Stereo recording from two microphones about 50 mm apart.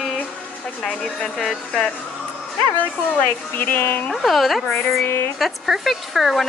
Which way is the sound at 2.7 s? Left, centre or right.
Left.